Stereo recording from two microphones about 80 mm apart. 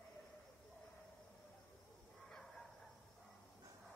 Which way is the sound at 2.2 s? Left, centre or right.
Centre.